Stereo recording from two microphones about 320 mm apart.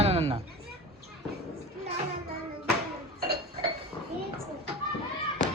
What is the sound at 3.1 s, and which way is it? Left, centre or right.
Dishes, right.